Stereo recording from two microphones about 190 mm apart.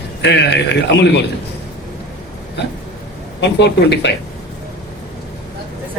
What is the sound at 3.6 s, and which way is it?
Speech, 65° left (ahead or behind).